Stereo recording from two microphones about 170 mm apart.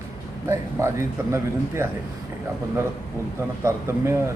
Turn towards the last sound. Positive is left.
turn(degrees=-15)  # may be behind; listen again after turning